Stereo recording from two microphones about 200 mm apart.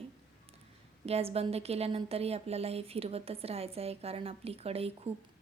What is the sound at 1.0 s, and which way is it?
Speech, 30° right (ahead or behind).